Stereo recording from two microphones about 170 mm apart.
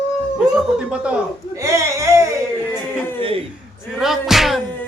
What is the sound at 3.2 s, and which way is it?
Chuckle, 35° right (ahead or behind).